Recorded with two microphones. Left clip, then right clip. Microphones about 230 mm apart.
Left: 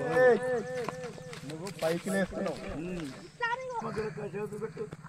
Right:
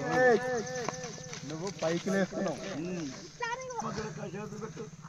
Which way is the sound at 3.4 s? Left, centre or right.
Centre.